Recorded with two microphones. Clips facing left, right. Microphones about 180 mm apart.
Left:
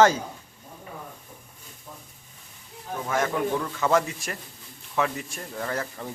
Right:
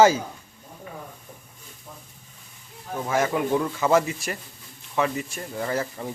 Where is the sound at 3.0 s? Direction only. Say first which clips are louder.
Right 2 dB; 10° right (ahead or behind).